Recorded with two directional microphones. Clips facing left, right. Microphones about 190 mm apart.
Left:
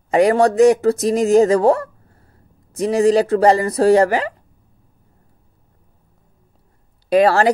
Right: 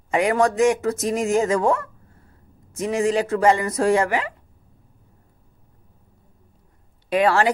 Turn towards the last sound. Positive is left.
turn(degrees=40)  # may be behind; listen again after turning